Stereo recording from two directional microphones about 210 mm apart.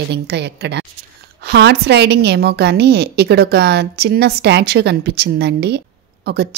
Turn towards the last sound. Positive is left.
turn(degrees=-50)  # may be behind; listen again after turning